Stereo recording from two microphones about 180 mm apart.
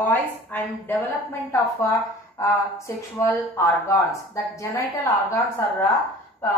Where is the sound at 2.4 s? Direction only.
15° left (ahead or behind).